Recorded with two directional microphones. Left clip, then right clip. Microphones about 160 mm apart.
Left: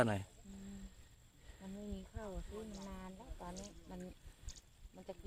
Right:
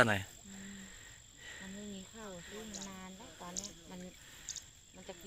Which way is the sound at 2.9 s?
65° left (ahead or behind).